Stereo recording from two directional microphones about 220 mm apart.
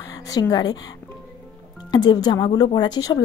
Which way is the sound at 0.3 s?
15° left (ahead or behind).